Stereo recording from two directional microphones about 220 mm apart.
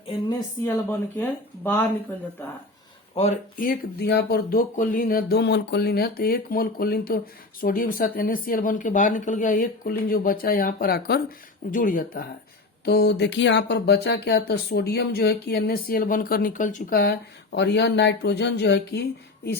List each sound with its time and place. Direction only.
0.1 s speech: 20° left (ahead or behind)
3.2 s speech: 35° left (ahead or behind)